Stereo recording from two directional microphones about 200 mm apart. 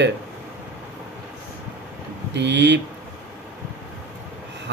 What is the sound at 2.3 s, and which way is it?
Speech, 60° right (ahead or behind).